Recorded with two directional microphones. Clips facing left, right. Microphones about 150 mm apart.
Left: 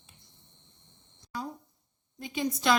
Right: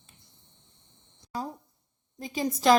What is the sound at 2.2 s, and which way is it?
Speech, 40° right (ahead or behind).